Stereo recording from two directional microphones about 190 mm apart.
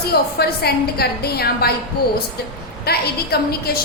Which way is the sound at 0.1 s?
55° left (ahead or behind).